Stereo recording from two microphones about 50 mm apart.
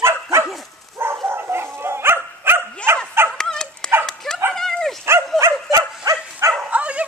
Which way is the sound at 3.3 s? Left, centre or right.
Centre.